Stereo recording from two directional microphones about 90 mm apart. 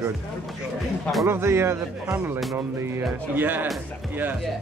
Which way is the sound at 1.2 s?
30° right (ahead or behind).